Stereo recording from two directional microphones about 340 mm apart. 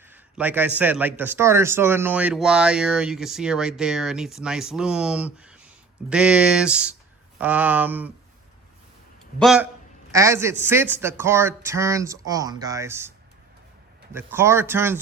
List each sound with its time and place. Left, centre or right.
0.1 s a man's voice: centre
9.4 s a man's voice: centre